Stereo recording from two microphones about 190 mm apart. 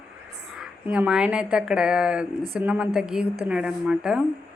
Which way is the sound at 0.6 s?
5° right (ahead or behind).